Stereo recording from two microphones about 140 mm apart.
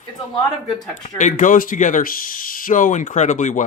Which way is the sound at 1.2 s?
70° left (ahead or behind).